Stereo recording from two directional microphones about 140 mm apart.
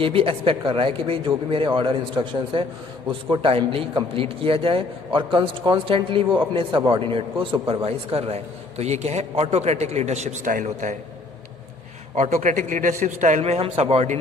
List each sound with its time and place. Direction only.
0.0 s a man's voice: 40° right (ahead or behind); by 10.9 s 65° right (ahead or behind)
12.1 s a man's voice: 60° right (ahead or behind)